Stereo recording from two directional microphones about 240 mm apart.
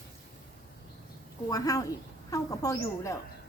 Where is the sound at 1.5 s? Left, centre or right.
Centre.